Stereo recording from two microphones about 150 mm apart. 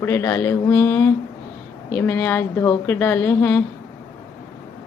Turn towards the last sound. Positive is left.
turn(degrees=15)  # may be behind; listen again after turning